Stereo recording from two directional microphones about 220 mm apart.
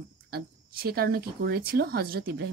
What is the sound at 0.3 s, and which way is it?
Speech, 45° right (ahead or behind).